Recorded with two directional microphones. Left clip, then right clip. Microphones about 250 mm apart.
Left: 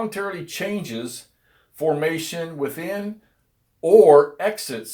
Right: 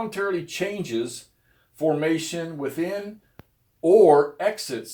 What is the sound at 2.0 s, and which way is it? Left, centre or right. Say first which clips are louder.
Speech: left 1 dB; left.